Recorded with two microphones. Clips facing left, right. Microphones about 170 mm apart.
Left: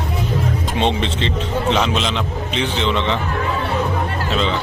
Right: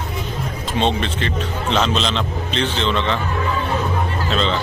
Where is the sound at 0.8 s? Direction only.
20° left (ahead or behind).